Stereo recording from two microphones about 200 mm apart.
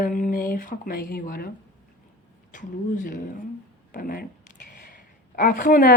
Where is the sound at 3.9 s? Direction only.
45° left (ahead or behind).